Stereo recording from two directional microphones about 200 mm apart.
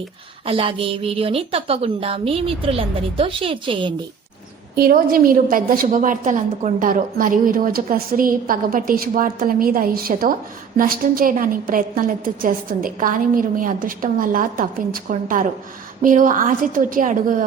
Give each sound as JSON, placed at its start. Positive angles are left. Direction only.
{"t": 0.4, "sound": "a woman's voice", "side_deg": -30}
{"t": 4.7, "sound": "a woman's voice", "side_deg": -50}